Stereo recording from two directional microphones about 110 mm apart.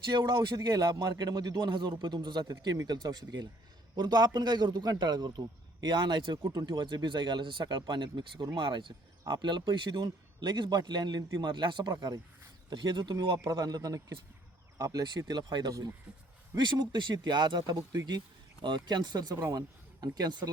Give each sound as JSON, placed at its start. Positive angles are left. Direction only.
{"t": 0.1, "sound": "speech", "side_deg": -45}
{"t": 0.5, "sound": "a man's voice", "side_deg": -35}
{"t": 13.5, "sound": "a man's voice", "side_deg": -35}